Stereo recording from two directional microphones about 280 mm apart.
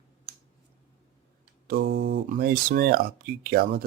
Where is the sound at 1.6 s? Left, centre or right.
Right.